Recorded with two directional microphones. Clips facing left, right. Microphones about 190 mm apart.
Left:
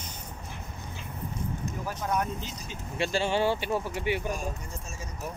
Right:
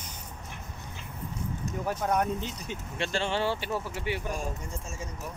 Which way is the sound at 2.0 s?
50° right (ahead or behind).